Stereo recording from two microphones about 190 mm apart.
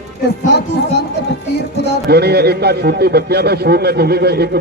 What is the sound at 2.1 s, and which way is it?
A man's voice, 60° right (ahead or behind).